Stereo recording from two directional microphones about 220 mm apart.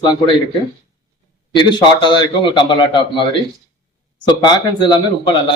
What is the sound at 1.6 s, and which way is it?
A man's voice, 20° left (ahead or behind).